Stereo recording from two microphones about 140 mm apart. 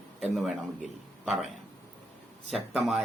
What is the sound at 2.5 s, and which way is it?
Speech, centre (ahead or behind).